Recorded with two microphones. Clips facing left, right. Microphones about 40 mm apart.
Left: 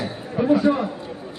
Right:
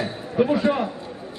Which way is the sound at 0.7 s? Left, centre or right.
Right.